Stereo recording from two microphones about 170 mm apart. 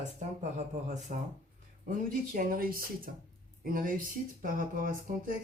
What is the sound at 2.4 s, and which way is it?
Speech, 55° right (ahead or behind).